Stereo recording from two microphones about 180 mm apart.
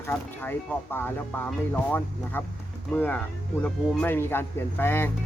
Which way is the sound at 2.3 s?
10° left (ahead or behind).